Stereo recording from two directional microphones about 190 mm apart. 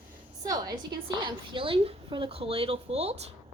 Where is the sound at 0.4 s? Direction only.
20° right (ahead or behind).